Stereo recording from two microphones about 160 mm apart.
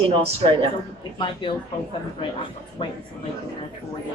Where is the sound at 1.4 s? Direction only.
30° left (ahead or behind).